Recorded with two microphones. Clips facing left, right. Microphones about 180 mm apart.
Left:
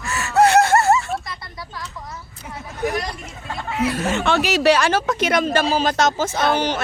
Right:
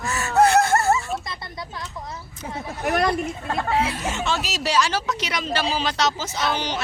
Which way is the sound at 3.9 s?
60° left (ahead or behind).